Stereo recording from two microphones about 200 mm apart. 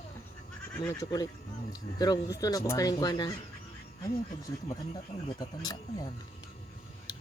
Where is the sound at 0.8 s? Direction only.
10° left (ahead or behind).